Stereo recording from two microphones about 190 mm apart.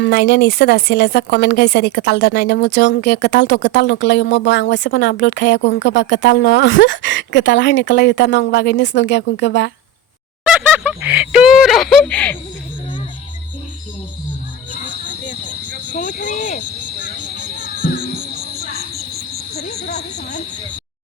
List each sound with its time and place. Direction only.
0.0 s a woman's voice: 55° left (ahead or behind)
10.4 s speech: 5° right (ahead or behind)
16.0 s cricket: 40° left (ahead or behind)
17.3 s music: 40° right (ahead or behind)
18.9 s cricket: 55° right (ahead or behind)